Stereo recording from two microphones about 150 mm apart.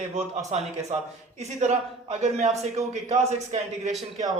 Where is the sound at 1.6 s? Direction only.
50° right (ahead or behind).